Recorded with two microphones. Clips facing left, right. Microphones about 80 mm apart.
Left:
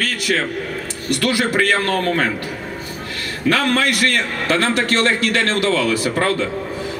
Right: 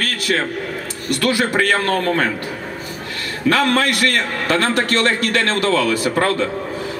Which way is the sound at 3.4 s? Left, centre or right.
Right.